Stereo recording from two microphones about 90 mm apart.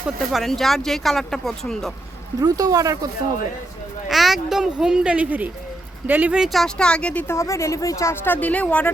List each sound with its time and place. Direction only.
0.3 s speech: centre (ahead or behind)
2.4 s speech: 40° right (ahead or behind)
4.1 s speech: centre (ahead or behind); by 6.4 s 15° right (ahead or behind)
6.4 s speech: centre (ahead or behind)
7.3 s speech: 35° left (ahead or behind)
8.1 s speech: 25° left (ahead or behind)